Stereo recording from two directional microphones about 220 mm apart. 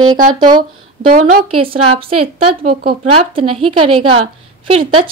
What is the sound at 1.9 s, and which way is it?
A woman's voice, 25° right (ahead or behind).